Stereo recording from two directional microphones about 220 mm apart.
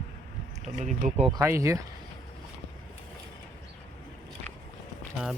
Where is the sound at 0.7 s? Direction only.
35° right (ahead or behind).